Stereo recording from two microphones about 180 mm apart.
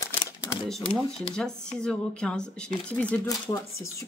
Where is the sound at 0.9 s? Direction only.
5° left (ahead or behind).